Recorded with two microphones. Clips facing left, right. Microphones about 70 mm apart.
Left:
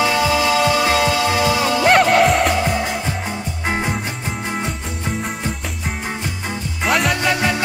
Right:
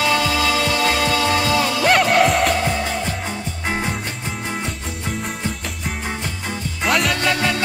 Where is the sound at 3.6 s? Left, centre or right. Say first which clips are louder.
Left 2 dB; centre.